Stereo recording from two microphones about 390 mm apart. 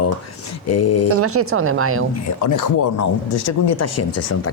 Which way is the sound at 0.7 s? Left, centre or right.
Left.